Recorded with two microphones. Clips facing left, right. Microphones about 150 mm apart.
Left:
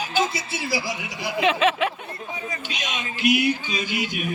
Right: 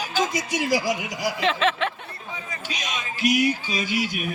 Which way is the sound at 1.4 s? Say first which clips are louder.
Left 3 dB; 5° left (ahead or behind).